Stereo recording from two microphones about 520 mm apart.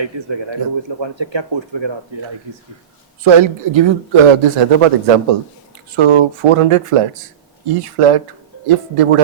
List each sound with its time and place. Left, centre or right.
0.0 s speech: right
3.2 s speech: right
6.0 s speech: right